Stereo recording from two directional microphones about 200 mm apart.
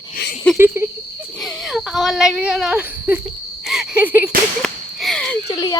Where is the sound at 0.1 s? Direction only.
55° left (ahead or behind).